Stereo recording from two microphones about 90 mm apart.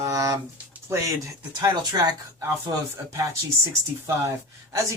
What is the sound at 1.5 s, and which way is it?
Speech, 50° right (ahead or behind).